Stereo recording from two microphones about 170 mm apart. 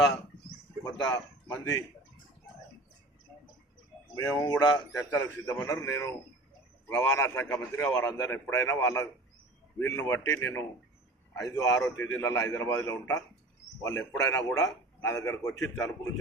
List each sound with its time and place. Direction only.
0.9 s a man's voice: 20° left (ahead or behind)
4.1 s a man's voice: 20° left (ahead or behind)